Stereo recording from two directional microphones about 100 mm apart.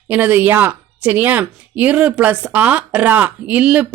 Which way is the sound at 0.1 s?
15° right (ahead or behind).